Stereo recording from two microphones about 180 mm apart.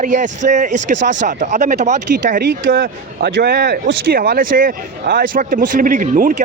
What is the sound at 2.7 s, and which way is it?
Speech, 60° right (ahead or behind).